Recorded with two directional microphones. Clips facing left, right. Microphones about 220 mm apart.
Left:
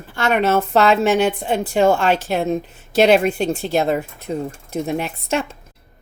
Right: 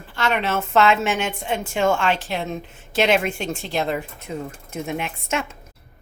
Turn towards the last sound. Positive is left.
turn(degrees=35)  # may be behind; listen again after turning